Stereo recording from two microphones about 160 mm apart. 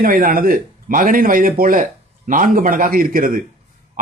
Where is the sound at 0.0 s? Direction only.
65° right (ahead or behind).